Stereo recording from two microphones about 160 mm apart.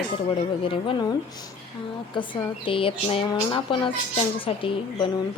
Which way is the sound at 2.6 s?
35° left (ahead or behind).